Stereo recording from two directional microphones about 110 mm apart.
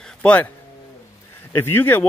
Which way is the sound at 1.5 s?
20° left (ahead or behind).